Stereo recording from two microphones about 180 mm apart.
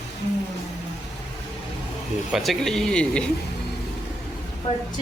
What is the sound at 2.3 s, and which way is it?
Speech, centre (ahead or behind).